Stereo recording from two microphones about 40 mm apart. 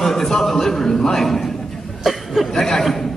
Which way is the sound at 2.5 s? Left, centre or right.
Centre.